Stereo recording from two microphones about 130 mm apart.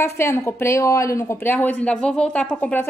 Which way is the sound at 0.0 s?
20° left (ahead or behind).